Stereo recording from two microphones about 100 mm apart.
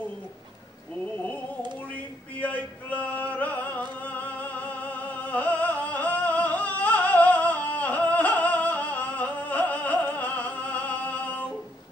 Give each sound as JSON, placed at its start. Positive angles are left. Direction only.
{"t": 2.4, "sound": "music", "side_deg": 15}